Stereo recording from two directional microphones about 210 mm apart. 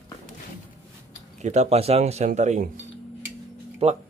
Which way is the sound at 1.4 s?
30° right (ahead or behind).